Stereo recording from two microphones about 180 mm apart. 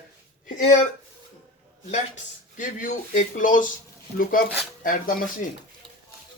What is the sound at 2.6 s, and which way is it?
Speech, 45° left (ahead or behind).